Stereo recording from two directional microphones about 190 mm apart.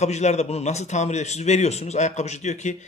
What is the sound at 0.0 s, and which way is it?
A man's voice, 35° left (ahead or behind).